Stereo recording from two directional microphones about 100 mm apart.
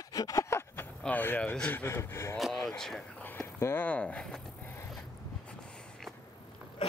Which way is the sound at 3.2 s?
20° left (ahead or behind).